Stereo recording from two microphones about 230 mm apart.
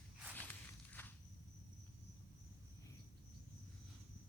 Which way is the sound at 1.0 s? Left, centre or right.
Centre.